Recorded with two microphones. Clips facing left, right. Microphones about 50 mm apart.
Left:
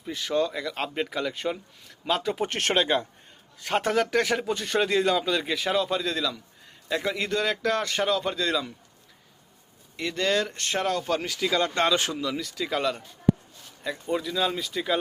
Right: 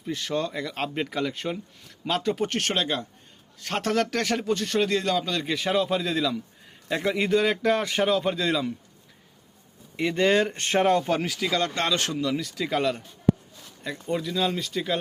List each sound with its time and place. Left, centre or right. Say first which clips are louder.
0.0 s a man's voice: left 2 dB; centre
2.5 s speech: left 3 dB; left
3.6 s a man's voice: left 1 dB; centre
10.0 s speech: right 4 dB; centre
11.1 s a man's voice: right 1 dB; centre